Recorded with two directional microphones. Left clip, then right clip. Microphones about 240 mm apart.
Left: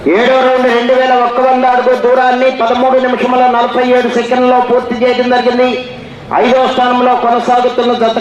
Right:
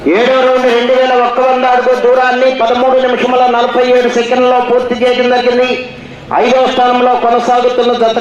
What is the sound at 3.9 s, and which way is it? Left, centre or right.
A man's voice, right.